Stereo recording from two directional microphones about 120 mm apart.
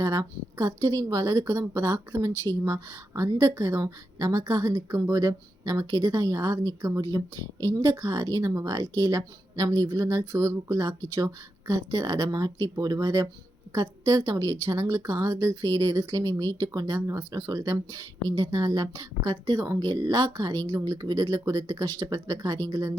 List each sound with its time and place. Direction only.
0.0 s a woman's voice: 25° right (ahead or behind)
2.3 s speech: 15° left (ahead or behind)
2.6 s a woman's voice: 25° right (ahead or behind)